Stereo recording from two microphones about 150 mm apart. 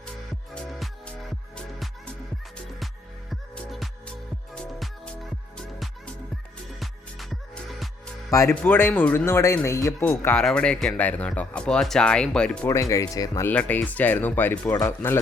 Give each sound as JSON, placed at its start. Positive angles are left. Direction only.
{"t": 0.5, "sound": "music", "side_deg": 5}
{"t": 2.7, "sound": "music", "side_deg": 0}
{"t": 8.3, "sound": "speech", "side_deg": 20}
{"t": 12.6, "sound": "speech", "side_deg": 20}
{"t": 13.5, "sound": "speech", "side_deg": 10}